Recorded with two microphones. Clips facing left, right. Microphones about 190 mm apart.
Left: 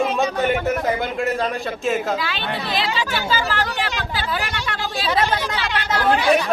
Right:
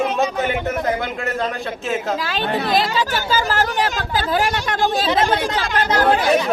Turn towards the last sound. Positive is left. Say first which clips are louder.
# right 3 dB
turn(degrees=-45)  # may be behind; listen again after turning